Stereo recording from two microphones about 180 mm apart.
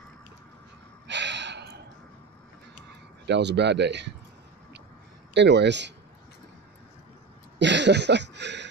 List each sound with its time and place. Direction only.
1.0 s gasp: 75° right (ahead or behind)
3.3 s speech: 70° right (ahead or behind)
5.3 s speech: 70° right (ahead or behind)
7.5 s a sound: 75° right (ahead or behind)